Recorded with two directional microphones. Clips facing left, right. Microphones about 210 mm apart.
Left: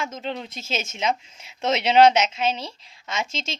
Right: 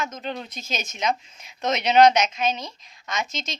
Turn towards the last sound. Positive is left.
turn(degrees=25)  # may be behind; listen again after turning